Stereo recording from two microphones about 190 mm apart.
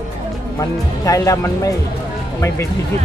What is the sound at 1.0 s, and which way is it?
Speech, 15° left (ahead or behind).